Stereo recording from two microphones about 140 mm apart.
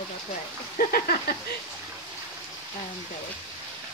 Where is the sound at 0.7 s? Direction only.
90° left.